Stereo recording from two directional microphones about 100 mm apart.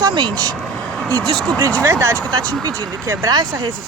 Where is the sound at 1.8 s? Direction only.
30° right (ahead or behind).